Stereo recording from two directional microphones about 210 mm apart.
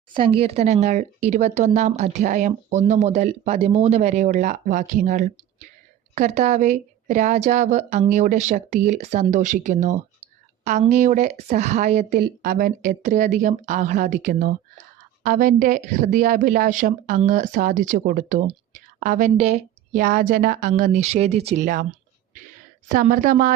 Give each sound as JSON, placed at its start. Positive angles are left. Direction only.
{"t": 0.1, "sound": "speech", "side_deg": -25}
{"t": 22.9, "sound": "speech", "side_deg": -40}